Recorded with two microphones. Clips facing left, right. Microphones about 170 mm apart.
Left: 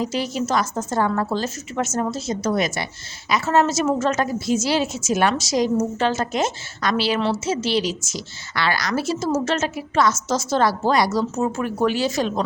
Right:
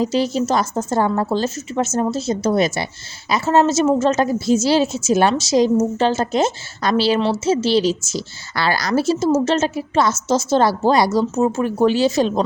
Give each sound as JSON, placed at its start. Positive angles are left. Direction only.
{"t": 0.0, "sound": "a woman's voice", "side_deg": -30}